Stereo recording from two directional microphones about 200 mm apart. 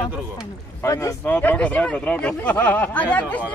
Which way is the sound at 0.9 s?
15° left (ahead or behind).